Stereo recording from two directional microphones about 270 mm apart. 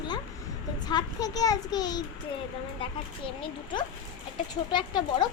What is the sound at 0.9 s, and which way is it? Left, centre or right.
A child's voice, centre.